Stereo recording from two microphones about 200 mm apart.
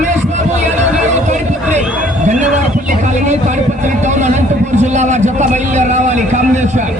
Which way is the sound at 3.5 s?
40° right (ahead or behind).